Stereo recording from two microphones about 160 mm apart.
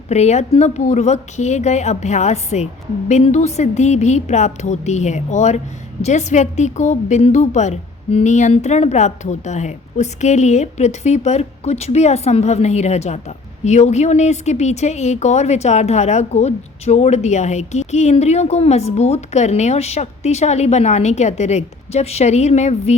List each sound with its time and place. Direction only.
0.1 s a woman's voice: 45° left (ahead or behind)